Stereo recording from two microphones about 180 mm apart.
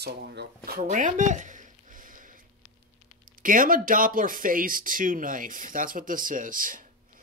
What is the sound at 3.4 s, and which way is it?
Speech, 50° right (ahead or behind).